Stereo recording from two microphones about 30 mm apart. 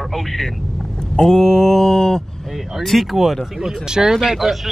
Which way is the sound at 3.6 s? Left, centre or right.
Centre.